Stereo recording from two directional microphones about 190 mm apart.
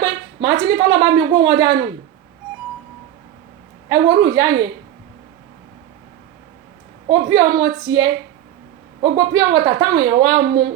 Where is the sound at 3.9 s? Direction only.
20° right (ahead or behind).